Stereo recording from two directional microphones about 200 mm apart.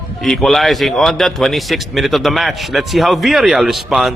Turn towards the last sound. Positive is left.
turn(degrees=0)  # may be behind; listen again after turning